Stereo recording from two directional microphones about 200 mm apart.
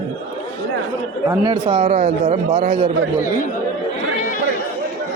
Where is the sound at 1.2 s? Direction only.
20° right (ahead or behind).